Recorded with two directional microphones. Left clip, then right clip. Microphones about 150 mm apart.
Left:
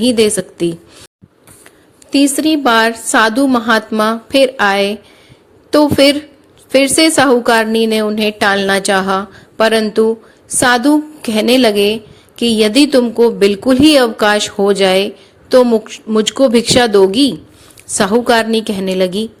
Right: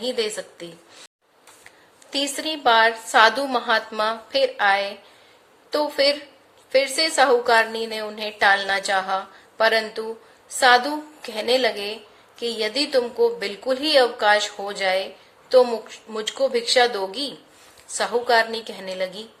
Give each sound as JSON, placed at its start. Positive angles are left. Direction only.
{"t": 0.0, "sound": "a woman's voice", "side_deg": 45}
{"t": 2.0, "sound": "a woman's voice", "side_deg": 35}